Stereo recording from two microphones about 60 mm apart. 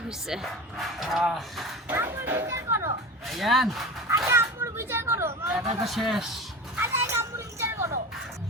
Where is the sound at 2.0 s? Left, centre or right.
Right.